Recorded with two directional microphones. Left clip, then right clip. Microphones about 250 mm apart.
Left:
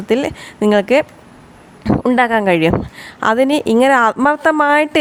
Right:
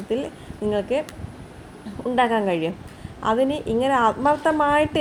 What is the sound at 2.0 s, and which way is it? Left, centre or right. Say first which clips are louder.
Speech: left 6 dB; left.